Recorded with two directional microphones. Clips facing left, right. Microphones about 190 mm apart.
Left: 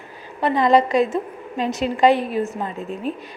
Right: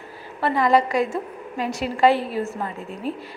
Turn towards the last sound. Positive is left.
turn(degrees=20)  # may be behind; listen again after turning